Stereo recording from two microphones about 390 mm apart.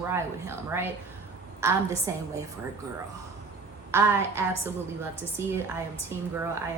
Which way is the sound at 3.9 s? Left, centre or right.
Centre.